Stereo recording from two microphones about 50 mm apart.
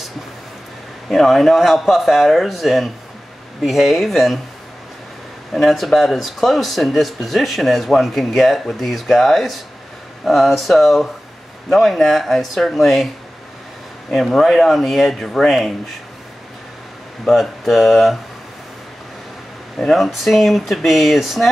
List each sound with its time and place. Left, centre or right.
1.0 s speech: centre
5.5 s speech: centre
14.1 s speech: centre
17.2 s speech: centre
19.8 s speech: centre